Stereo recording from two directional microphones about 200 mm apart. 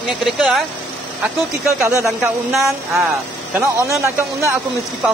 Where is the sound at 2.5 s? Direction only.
Centre (ahead or behind).